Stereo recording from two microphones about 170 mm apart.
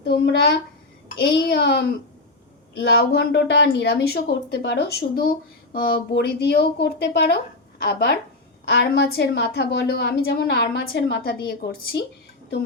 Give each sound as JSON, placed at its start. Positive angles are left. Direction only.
{"t": 0.0, "sound": "speech", "side_deg": 70}
{"t": 2.8, "sound": "a woman's voice", "side_deg": 65}
{"t": 8.6, "sound": "speech", "side_deg": 70}